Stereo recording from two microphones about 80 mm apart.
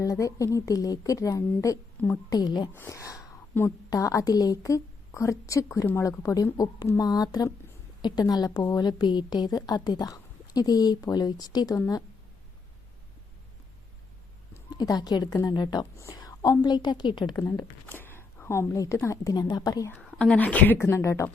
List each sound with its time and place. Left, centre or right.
0.0 s a woman's voice: left
2.3 s a woman's voice: left
2.9 s a sound: left
3.8 s a woman's voice: left
14.8 s a woman's voice: left
16.1 s a sound: left
16.6 s a woman's voice: left
17.8 s a sound: left
19.0 s a woman's voice: left
20.1 s speech: centre
20.7 s speech: left